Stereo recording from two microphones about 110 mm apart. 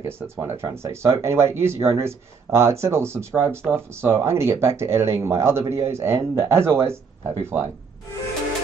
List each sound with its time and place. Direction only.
0.0 s speech: 25° right (ahead or behind)